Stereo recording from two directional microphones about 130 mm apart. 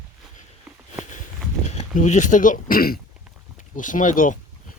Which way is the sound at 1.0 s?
70° left (ahead or behind).